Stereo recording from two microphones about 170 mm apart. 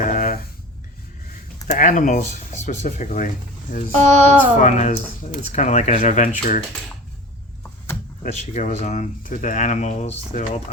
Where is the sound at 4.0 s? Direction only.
40° right (ahead or behind).